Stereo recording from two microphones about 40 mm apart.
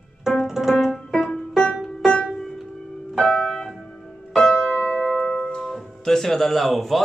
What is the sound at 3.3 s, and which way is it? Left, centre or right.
Keyboard, centre.